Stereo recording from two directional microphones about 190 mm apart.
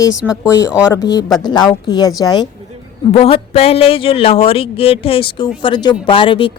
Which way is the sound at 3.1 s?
30° left (ahead or behind).